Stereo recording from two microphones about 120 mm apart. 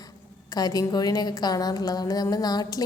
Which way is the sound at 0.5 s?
30° left (ahead or behind).